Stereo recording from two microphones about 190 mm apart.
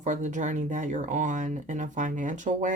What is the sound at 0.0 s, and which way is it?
Speech, 40° right (ahead or behind).